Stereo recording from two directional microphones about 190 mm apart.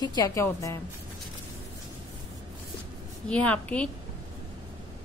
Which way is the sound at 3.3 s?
5° left (ahead or behind).